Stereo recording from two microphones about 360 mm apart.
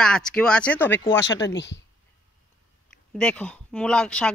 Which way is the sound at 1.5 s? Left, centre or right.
Left.